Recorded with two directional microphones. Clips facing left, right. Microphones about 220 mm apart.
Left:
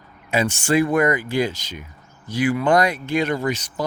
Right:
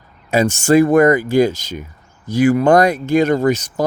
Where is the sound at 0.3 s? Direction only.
40° right (ahead or behind).